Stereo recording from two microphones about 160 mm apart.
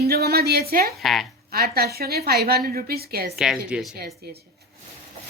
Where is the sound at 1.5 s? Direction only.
70° right (ahead or behind).